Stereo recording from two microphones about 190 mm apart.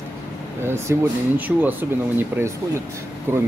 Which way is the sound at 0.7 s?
10° right (ahead or behind).